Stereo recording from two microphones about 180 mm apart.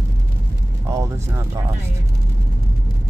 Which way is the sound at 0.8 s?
15° right (ahead or behind).